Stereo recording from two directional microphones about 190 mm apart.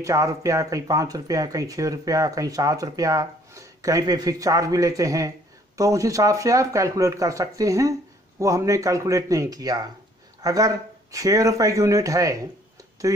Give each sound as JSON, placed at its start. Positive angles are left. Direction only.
{"t": 0.0, "sound": "speech", "side_deg": -15}